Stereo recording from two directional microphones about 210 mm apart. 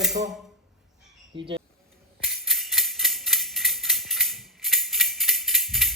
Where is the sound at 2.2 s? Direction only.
Centre (ahead or behind).